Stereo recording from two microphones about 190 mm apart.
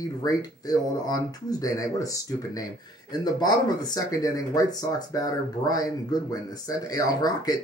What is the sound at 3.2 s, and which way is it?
Speech, 20° left (ahead or behind).